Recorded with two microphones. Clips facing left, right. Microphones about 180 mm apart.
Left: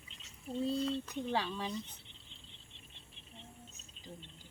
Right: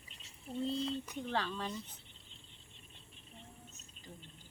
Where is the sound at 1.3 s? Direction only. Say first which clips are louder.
Left 1 dB; 10° left (ahead or behind).